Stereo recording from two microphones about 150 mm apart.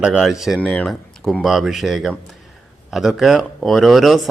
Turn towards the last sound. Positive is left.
turn(degrees=0)  # may be behind; listen again after turning